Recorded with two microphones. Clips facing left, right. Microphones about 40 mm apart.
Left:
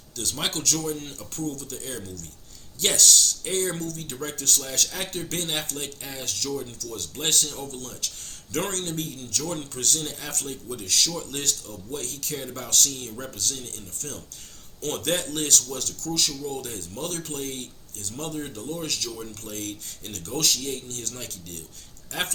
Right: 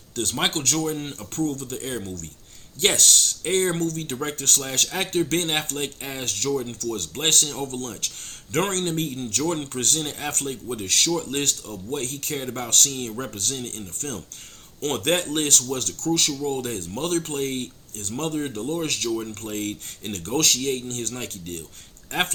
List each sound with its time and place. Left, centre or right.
0.2 s speech: right